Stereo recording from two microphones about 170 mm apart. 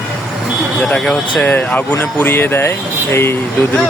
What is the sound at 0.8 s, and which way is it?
Speech, 5° left (ahead or behind).